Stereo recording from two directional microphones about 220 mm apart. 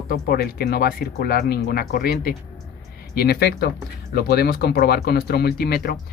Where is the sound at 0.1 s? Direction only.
45° left (ahead or behind).